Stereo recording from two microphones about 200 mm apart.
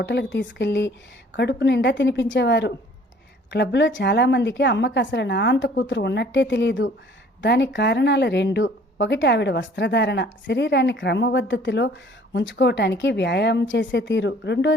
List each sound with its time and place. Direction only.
0.0 s speech: 60° left (ahead or behind)